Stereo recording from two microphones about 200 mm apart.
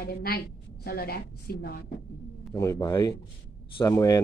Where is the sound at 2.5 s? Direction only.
15° left (ahead or behind).